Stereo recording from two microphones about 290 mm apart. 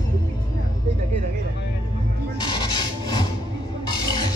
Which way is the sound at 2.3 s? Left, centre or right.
Centre.